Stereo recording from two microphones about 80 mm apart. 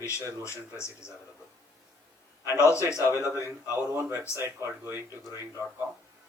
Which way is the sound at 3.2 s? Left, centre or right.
Left.